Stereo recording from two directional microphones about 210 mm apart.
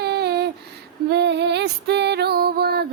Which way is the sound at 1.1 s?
55° right (ahead or behind).